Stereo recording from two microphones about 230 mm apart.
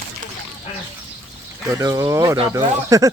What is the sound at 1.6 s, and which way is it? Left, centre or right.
Speech, centre.